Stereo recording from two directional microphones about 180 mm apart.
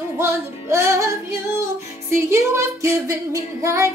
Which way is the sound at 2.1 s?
15° right (ahead or behind).